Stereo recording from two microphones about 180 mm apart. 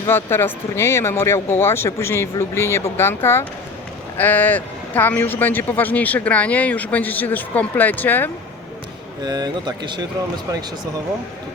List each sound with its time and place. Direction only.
0.1 s a man's voice: 10° left (ahead or behind)
9.2 s speech: 20° right (ahead or behind)